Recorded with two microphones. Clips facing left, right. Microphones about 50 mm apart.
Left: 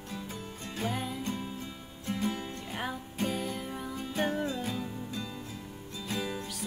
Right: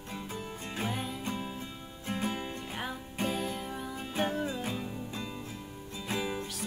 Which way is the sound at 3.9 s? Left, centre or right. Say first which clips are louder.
Left 1 dB; centre.